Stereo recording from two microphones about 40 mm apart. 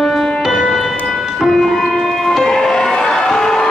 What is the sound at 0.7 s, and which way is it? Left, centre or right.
Music, centre.